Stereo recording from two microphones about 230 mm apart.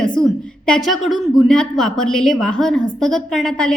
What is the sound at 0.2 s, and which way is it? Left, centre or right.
A woman's voice, centre.